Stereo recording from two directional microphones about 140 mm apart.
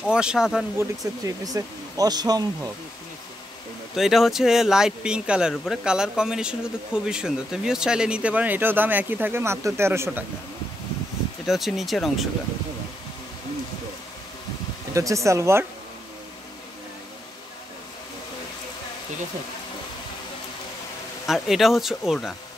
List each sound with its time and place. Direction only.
0.0 s speech: 5° right (ahead or behind)
0.7 s speech: 25° right (ahead or behind)
3.9 s speech: centre (ahead or behind); by 10.2 s 20° right (ahead or behind)
11.4 s speech: centre (ahead or behind)
15.0 s speech: 20° right (ahead or behind)
21.3 s speech: centre (ahead or behind)